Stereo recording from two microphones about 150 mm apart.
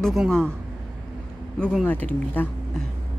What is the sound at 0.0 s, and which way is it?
Speech, centre (ahead or behind).